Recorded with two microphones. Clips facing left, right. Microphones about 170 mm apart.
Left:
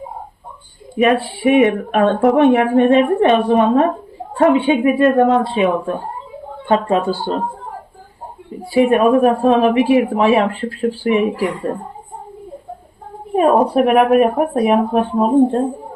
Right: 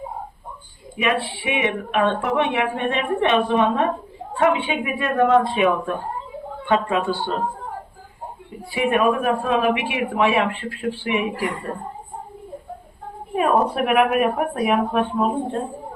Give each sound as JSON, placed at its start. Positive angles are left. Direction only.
{"t": 0.9, "sound": "a woman's voice", "side_deg": 40}
{"t": 8.7, "sound": "a woman's voice", "side_deg": 35}
{"t": 13.3, "sound": "a woman's voice", "side_deg": 35}